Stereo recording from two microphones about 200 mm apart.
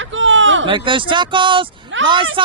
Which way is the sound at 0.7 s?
25° right (ahead or behind).